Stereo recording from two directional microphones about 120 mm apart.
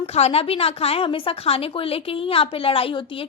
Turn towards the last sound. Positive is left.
turn(degrees=50)  # may be behind; listen again after turning